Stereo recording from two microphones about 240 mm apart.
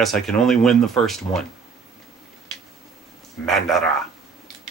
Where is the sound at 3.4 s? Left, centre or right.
Centre.